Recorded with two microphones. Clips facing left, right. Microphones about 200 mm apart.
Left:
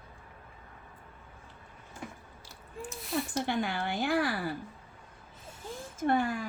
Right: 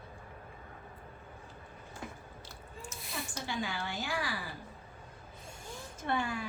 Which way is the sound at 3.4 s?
55° left (ahead or behind).